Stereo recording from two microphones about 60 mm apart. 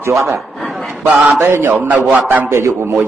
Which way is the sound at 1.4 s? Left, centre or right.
Right.